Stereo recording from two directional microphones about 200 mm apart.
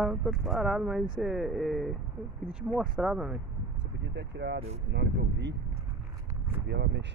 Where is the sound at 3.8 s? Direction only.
60° right (ahead or behind).